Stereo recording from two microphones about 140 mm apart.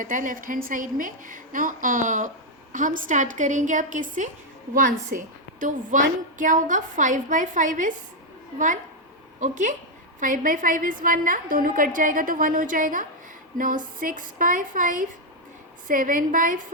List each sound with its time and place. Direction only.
0.0 s a woman's voice: 70° right (ahead or behind)
10.2 s a woman's voice: 75° right (ahead or behind)